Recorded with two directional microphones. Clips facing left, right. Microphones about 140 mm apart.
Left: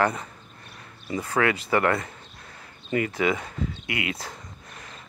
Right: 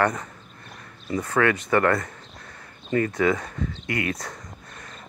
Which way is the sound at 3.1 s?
25° left (ahead or behind).